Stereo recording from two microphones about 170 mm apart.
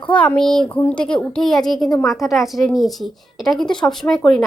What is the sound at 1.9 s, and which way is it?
Speech, 20° left (ahead or behind).